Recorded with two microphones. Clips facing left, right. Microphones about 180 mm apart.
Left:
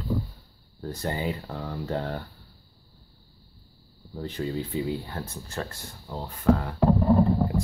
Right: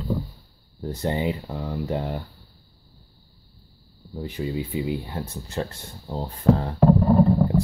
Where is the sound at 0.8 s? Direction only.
20° right (ahead or behind).